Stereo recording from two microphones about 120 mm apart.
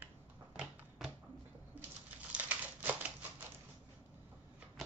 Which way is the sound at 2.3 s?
15° right (ahead or behind).